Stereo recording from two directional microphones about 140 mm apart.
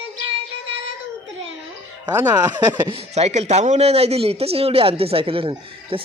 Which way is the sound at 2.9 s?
45° right (ahead or behind).